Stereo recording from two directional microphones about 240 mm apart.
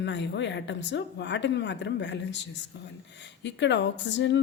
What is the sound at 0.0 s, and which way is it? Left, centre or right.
Speech, left.